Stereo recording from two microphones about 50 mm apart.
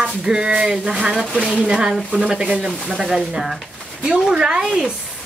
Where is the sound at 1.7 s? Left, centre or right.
Centre.